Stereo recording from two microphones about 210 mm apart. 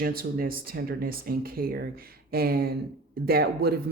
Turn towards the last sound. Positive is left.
turn(degrees=-50)  # may be behind; listen again after turning